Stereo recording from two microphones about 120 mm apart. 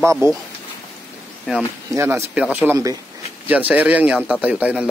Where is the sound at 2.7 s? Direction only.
30° right (ahead or behind).